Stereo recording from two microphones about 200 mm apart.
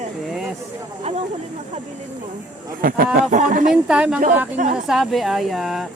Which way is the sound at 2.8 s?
45° right (ahead or behind).